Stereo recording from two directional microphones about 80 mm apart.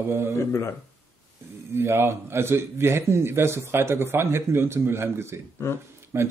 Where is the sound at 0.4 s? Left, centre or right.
Left.